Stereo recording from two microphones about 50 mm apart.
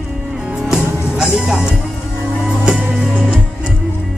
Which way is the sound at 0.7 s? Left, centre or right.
Centre.